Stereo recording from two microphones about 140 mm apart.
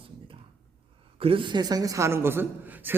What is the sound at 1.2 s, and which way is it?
A man's voice, 40° right (ahead or behind).